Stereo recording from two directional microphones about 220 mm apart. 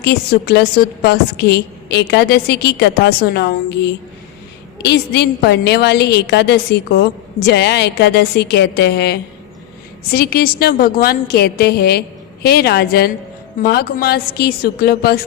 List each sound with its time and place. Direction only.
0.0 s a woman's voice: 45° left (ahead or behind)